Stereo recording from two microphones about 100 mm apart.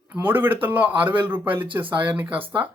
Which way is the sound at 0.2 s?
20° right (ahead or behind).